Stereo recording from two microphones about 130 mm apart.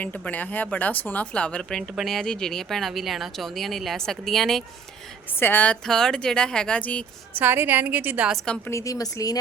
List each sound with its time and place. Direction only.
0.0 s speech: 10° left (ahead or behind)
5.4 s speech: 15° left (ahead or behind)
7.3 s a woman's voice: 15° right (ahead or behind)
8.6 s speech: 25° left (ahead or behind)